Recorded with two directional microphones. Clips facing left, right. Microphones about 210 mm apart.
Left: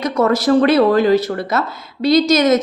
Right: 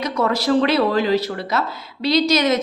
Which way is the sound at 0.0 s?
45° left (ahead or behind).